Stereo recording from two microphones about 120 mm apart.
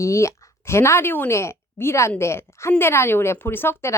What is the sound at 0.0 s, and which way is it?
A woman's voice, 25° left (ahead or behind).